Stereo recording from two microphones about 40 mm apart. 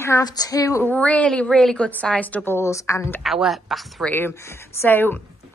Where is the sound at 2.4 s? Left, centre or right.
Left.